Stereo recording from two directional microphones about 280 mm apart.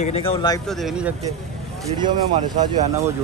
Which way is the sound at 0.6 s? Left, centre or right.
Centre.